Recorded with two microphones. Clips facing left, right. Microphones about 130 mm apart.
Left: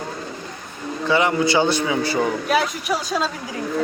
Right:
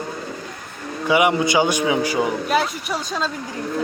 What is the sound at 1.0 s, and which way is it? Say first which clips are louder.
A man's voice: right 1 dB; 15° right (ahead or behind).